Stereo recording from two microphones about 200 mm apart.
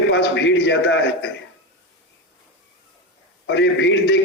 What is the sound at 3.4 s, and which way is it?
Speech, 60° left (ahead or behind).